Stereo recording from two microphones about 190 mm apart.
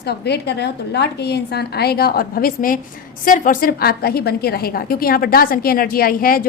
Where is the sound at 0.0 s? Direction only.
60° left (ahead or behind).